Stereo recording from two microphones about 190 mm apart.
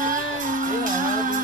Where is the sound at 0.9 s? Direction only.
45° right (ahead or behind).